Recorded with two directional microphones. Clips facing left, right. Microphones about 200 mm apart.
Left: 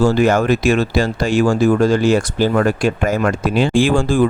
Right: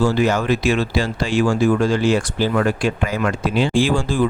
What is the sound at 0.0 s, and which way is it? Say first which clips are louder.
Speech: left 4 dB; 45° left (ahead or behind).